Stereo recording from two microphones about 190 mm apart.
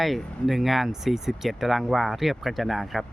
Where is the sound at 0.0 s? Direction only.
Centre (ahead or behind).